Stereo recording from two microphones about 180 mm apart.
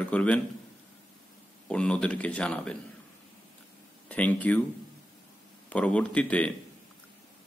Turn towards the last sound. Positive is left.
turn(degrees=5)  # may be behind; listen again after turning